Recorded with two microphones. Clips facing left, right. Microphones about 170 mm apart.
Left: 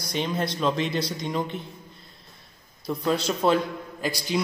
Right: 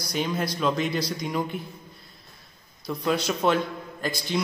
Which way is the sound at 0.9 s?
25° left (ahead or behind).